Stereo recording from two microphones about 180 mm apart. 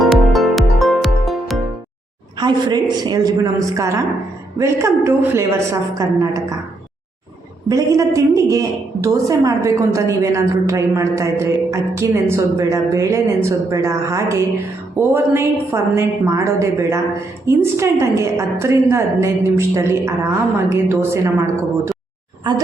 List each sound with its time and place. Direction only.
0.0 s music: centre (ahead or behind)
2.4 s a woman's voice: 20° right (ahead or behind)
7.7 s a woman's voice: 20° right (ahead or behind)